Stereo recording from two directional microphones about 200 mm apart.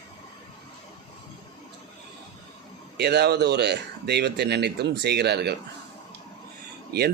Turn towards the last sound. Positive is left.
turn(degrees=-55)  # may be behind; listen again after turning